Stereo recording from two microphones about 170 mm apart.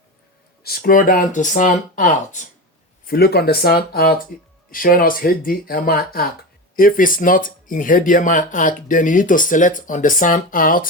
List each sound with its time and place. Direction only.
0.6 s speech: 65° left (ahead or behind); by 2.5 s 45° left (ahead or behind)
3.1 s speech: 65° left (ahead or behind)